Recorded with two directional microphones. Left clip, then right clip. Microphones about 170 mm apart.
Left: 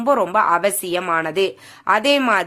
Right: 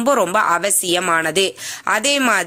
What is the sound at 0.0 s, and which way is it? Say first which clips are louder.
A woman's voice: right 1 dB; 15° right (ahead or behind).